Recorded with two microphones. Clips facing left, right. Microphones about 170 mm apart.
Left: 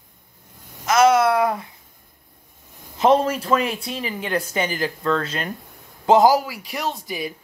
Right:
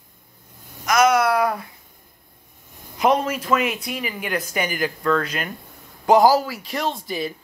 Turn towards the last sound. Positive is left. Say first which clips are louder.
# right 2 dB
turn(degrees=10)  # may be behind; listen again after turning